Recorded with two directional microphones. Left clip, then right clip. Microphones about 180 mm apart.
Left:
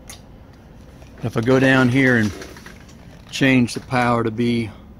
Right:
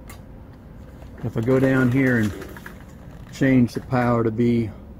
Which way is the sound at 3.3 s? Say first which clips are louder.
Left 3 dB; 40° left (ahead or behind).